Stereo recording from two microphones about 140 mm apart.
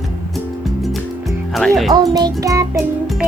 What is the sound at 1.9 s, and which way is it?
Music, 30° right (ahead or behind).